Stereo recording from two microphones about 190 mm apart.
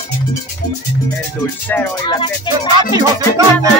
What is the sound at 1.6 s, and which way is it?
Speech, 10° left (ahead or behind).